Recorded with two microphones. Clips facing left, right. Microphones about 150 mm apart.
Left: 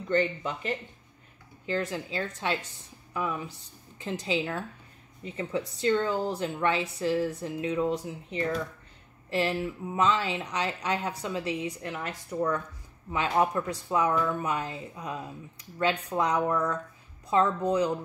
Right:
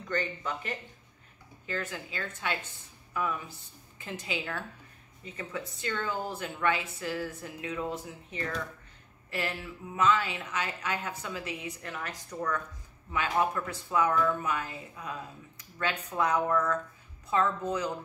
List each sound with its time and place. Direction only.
0.1 s a woman's voice: 25° left (ahead or behind)
1.9 s a woman's voice: 30° left (ahead or behind)
3.1 s a sound: 20° left (ahead or behind)
4.0 s a woman's voice: 30° left (ahead or behind)
15.8 s speech: 30° left (ahead or behind)
16.3 s speech: 15° left (ahead or behind)
17.3 s speech: 30° left (ahead or behind)